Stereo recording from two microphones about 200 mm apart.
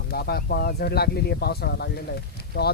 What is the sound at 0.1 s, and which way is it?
Speech, 50° left (ahead or behind).